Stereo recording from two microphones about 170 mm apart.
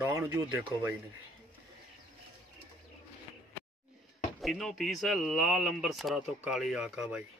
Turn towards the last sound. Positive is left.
turn(degrees=-5)  # may be behind; listen again after turning